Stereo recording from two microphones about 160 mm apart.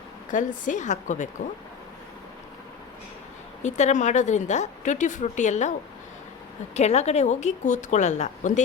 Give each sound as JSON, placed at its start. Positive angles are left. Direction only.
{"t": 0.3, "sound": "a woman's voice", "side_deg": 55}
{"t": 3.6, "sound": "a woman's voice", "side_deg": 45}
{"t": 6.7, "sound": "a woman's voice", "side_deg": 45}